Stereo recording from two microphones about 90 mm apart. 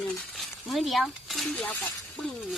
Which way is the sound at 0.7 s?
Centre (ahead or behind).